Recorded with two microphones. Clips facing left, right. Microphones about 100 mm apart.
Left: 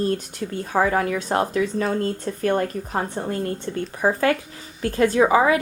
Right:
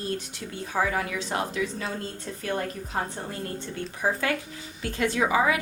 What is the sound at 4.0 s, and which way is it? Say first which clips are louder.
A woman's voice: left 7 dB; 50° left (ahead or behind).